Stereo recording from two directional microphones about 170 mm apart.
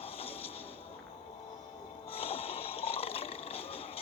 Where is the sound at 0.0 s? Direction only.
35° left (ahead or behind).